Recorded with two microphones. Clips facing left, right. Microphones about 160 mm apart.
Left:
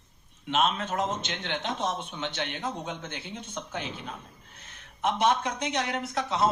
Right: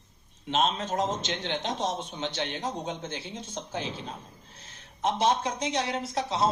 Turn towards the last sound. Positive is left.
turn(degrees=-30)  # may be behind; listen again after turning